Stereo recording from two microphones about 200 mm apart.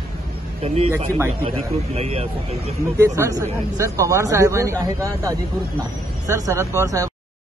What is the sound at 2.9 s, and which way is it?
Speech, 15° right (ahead or behind).